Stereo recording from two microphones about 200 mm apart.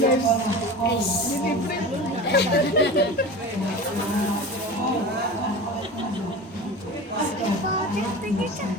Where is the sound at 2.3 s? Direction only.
60° left (ahead or behind).